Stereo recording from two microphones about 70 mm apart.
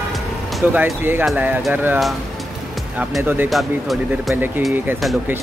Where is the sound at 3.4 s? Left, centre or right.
Centre.